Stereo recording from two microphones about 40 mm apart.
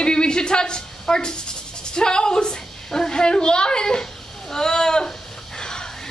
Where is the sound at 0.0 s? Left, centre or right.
Left.